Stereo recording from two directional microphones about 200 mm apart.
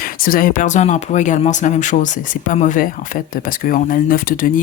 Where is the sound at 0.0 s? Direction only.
45° left (ahead or behind).